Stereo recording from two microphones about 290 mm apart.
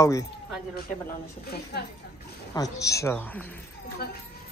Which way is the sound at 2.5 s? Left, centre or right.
Centre.